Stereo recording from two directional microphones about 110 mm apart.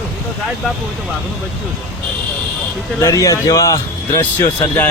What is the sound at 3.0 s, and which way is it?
Speech, 30° left (ahead or behind).